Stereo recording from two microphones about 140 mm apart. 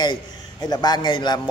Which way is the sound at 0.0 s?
30° left (ahead or behind).